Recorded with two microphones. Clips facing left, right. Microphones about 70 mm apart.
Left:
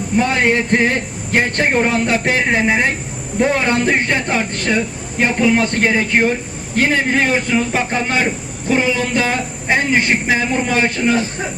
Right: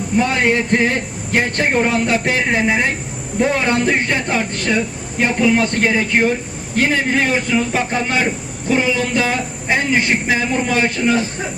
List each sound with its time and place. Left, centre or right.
0.2 s speech: left